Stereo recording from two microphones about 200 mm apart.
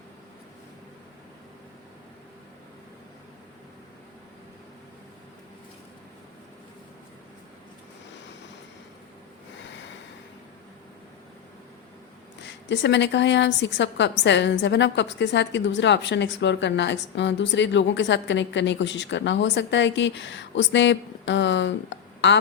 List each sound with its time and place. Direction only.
12.5 s a woman's voice: 60° left (ahead or behind)